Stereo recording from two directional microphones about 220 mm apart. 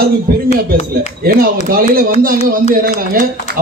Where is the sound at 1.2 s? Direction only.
45° right (ahead or behind).